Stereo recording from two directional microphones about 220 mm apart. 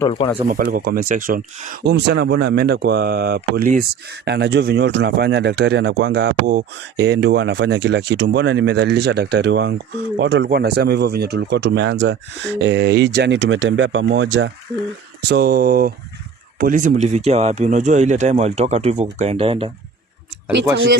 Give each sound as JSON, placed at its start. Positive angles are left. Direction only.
{"t": 0.0, "sound": "speech", "side_deg": 20}
{"t": 0.4, "sound": "speech", "side_deg": -40}
{"t": 15.3, "sound": "speech", "side_deg": -45}